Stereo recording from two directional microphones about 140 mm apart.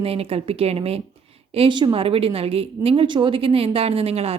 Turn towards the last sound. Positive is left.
turn(degrees=-45)  # may be behind; listen again after turning